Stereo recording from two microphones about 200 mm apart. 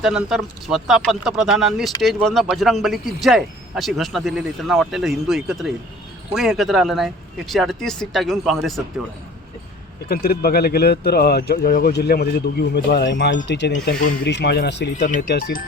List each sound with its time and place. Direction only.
0.3 s speech: centre (ahead or behind)
10.1 s speech: 50° left (ahead or behind)
14.9 s speech: 40° left (ahead or behind)